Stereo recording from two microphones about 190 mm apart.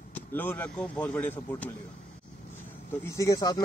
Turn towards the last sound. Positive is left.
turn(degrees=20)  # may be behind; listen again after turning